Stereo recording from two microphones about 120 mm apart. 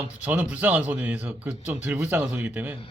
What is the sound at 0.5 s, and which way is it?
Speech, 10° right (ahead or behind).